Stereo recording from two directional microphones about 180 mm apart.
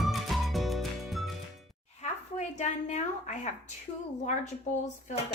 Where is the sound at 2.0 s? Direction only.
40° left (ahead or behind).